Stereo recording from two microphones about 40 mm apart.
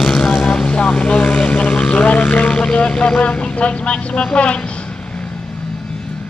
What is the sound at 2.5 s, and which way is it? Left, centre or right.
Vehicle, left.